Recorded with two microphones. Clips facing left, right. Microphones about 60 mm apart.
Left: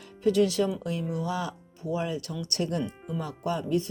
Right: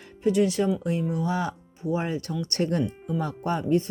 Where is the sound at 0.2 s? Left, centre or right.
Right.